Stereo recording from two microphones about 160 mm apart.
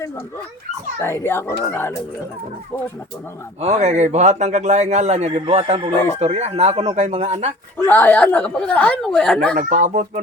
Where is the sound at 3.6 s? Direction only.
45° right (ahead or behind).